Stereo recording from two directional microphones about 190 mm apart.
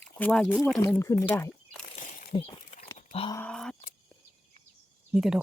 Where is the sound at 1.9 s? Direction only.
40° left (ahead or behind).